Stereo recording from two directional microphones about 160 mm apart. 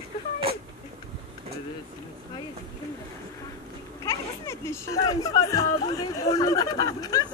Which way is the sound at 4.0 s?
20° left (ahead or behind).